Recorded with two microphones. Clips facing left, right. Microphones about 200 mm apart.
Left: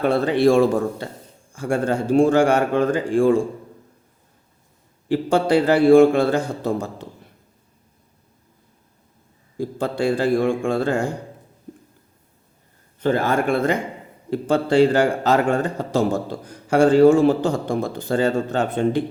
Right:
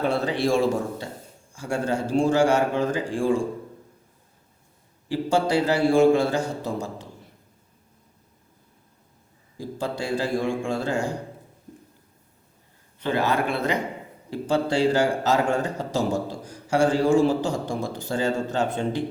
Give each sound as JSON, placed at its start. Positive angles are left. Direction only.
{"t": 0.0, "sound": "a man's voice", "side_deg": 55}
{"t": 5.0, "sound": "a man's voice", "side_deg": 60}
{"t": 9.6, "sound": "a man's voice", "side_deg": 55}
{"t": 13.0, "sound": "a man's voice", "side_deg": 50}